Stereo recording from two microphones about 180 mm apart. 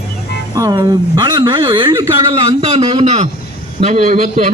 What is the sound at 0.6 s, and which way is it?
A man's voice, 20° right (ahead or behind).